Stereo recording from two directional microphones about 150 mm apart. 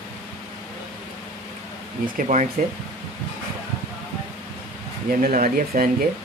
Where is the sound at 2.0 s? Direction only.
60° right (ahead or behind).